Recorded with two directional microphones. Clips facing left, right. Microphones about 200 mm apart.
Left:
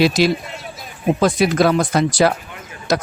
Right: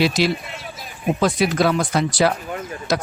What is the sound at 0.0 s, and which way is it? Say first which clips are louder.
Speech: left 4 dB; 45° left (ahead or behind).